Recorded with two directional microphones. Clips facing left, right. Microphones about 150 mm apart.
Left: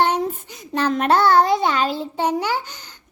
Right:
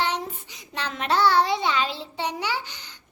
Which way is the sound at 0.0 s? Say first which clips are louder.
Left 8 dB; 50° left (ahead or behind).